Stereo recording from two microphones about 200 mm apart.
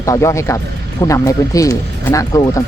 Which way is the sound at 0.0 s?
15° left (ahead or behind).